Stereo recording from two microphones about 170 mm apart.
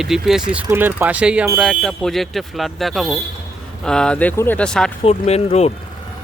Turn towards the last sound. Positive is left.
turn(degrees=40)  # may be behind; listen again after turning